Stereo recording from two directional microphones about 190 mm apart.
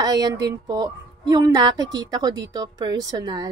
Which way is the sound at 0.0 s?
20° right (ahead or behind).